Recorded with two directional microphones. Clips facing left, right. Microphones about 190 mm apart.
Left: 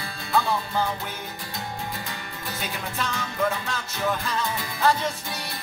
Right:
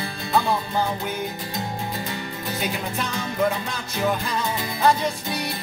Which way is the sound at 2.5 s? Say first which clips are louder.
Right 4 dB; 15° right (ahead or behind).